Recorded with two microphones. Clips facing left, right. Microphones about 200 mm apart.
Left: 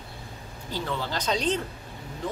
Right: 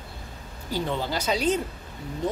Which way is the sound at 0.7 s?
15° right (ahead or behind).